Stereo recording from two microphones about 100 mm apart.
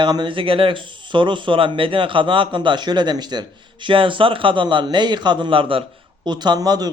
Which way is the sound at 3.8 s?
60° right (ahead or behind).